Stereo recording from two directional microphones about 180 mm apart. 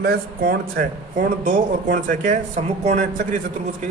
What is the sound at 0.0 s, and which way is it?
A man's voice, 55° right (ahead or behind).